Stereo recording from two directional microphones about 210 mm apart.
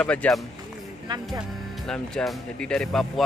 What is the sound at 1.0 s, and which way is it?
Speech, 20° right (ahead or behind).